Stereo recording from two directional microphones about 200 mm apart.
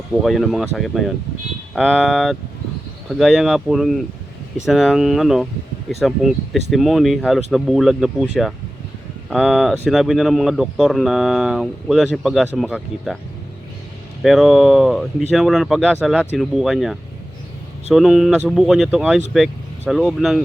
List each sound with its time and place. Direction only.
0.2 s speech: centre (ahead or behind)
9.3 s speech: centre (ahead or behind)
14.2 s speech: centre (ahead or behind)